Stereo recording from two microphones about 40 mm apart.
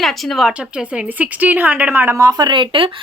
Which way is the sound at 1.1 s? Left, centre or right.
Right.